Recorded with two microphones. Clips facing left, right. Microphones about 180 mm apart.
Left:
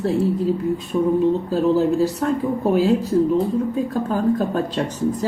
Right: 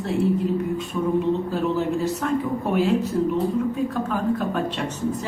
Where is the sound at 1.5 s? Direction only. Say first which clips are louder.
Left 6 dB; 35° left (ahead or behind).